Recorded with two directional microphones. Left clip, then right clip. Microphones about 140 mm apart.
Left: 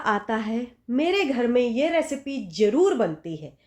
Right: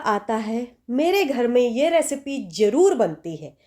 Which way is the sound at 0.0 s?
35° right (ahead or behind).